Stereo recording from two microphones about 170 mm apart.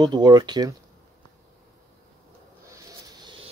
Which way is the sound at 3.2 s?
30° right (ahead or behind).